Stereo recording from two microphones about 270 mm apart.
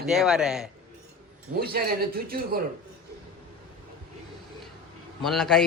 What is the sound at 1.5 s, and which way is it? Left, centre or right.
A man's voice, right.